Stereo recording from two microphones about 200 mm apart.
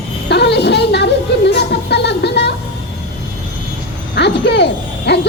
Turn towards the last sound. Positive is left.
turn(degrees=55)  # may be behind; listen again after turning